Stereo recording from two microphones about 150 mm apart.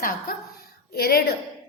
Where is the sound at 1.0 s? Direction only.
90° left.